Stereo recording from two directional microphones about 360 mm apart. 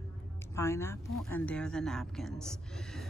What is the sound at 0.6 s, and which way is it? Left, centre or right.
Speech, centre.